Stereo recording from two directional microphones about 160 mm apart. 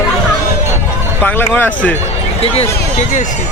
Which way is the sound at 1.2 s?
10° left (ahead or behind).